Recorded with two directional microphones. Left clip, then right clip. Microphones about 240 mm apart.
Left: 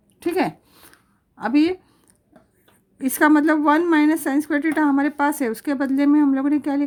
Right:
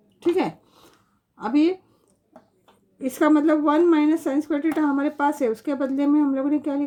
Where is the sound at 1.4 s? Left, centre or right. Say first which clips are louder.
Left 2 dB; left.